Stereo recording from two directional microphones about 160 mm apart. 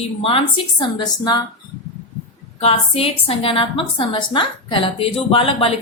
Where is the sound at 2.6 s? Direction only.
35° left (ahead or behind).